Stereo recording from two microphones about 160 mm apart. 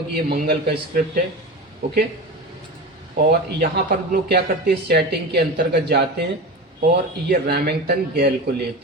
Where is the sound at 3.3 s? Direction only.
90° right.